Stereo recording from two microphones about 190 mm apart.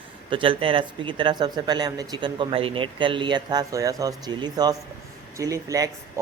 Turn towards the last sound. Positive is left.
turn(degrees=-20)  # may be behind; listen again after turning